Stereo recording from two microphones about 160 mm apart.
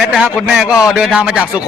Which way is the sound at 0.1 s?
5° right (ahead or behind).